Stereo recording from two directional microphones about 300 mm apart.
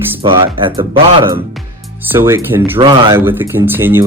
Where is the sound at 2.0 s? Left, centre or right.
Centre.